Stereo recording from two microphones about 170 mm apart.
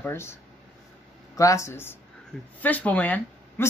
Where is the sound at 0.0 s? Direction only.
15° left (ahead or behind).